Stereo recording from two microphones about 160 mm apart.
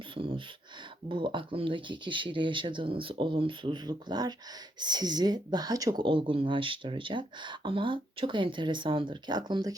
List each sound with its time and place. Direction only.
0.2 s speech: 35° right (ahead or behind)